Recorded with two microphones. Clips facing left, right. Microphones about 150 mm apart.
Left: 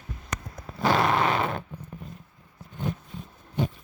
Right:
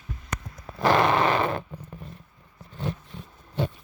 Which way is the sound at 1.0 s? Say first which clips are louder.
Right 2 dB; 70° right (ahead or behind).